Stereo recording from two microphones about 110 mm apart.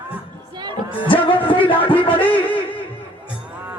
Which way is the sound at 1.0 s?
50° left (ahead or behind).